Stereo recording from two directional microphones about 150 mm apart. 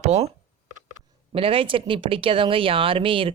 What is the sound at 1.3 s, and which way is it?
Speech, 40° right (ahead or behind).